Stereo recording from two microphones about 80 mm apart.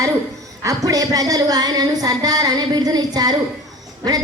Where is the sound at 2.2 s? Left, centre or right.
Right.